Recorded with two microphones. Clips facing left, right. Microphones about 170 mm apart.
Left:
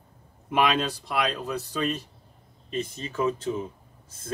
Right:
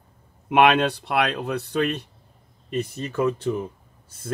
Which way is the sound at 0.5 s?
65° right (ahead or behind).